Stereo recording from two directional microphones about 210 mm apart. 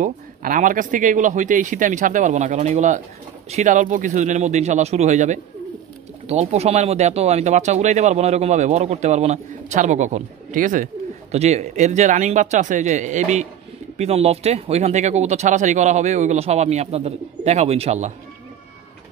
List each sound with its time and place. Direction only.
0.0 s speech: 40° right (ahead or behind)